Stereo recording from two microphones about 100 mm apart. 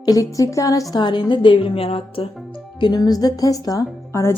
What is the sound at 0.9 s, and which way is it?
A woman's voice, 50° left (ahead or behind).